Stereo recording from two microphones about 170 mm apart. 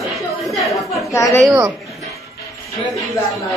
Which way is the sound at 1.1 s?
15° left (ahead or behind).